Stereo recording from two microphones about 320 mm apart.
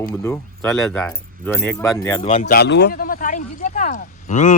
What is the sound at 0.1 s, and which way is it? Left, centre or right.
Speech, centre.